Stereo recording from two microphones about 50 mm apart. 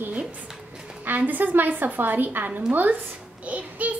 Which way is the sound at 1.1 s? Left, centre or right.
Right.